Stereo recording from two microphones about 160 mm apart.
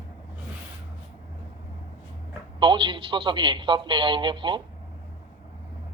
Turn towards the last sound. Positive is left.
turn(degrees=-30)  # may be behind; listen again after turning